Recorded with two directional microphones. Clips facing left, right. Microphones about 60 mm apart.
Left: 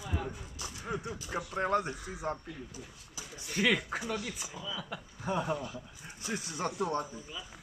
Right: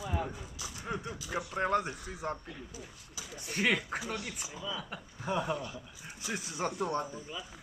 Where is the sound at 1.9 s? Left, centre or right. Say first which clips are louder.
Left 1 dB; centre.